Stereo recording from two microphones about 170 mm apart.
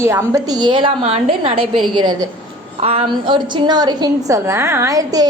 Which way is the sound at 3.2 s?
25° right (ahead or behind).